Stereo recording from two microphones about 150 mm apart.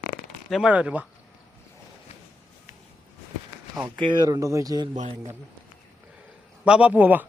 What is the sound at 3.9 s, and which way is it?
Speech, 30° right (ahead or behind).